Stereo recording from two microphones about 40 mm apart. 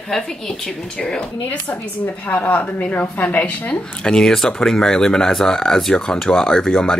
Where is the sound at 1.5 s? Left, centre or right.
Left.